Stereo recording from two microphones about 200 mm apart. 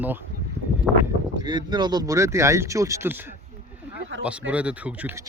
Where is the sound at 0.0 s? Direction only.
10° right (ahead or behind).